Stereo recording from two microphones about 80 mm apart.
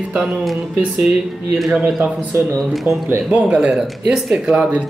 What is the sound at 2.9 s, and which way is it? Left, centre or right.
Speech, right.